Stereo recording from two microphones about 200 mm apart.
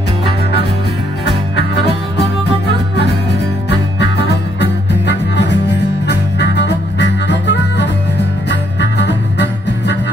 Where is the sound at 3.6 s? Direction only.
60° left (ahead or behind).